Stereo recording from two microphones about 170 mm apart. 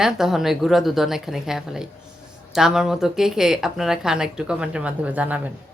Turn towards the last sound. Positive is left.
turn(degrees=-10)  # may be behind; listen again after turning